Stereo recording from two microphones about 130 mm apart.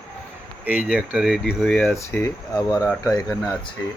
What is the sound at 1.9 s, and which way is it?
Speech, 20° left (ahead or behind).